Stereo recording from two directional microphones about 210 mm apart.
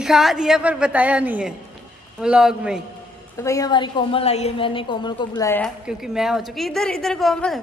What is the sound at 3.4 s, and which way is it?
A woman's voice, 15° left (ahead or behind).